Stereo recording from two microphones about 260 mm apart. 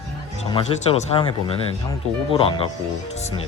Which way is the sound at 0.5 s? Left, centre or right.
Left.